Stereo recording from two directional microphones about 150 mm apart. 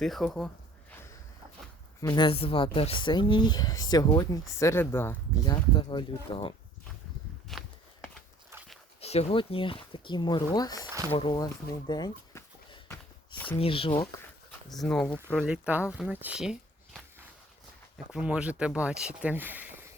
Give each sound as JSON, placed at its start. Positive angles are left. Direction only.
{"t": 0.0, "sound": "speech", "side_deg": 0}
{"t": 2.0, "sound": "speech", "side_deg": 25}
{"t": 2.2, "sound": "speech", "side_deg": 40}
{"t": 5.7, "sound": "speech", "side_deg": 30}
{"t": 7.5, "sound": "walk", "side_deg": 0}
{"t": 9.0, "sound": "speech", "side_deg": 45}
{"t": 11.3, "sound": "a sound", "side_deg": 25}
{"t": 13.6, "sound": "speech", "side_deg": 40}
{"t": 14.7, "sound": "speech", "side_deg": 0}
{"t": 15.4, "sound": "speech", "side_deg": -10}